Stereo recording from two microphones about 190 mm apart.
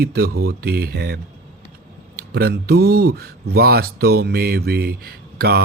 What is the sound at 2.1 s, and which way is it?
Speech, 55° right (ahead or behind).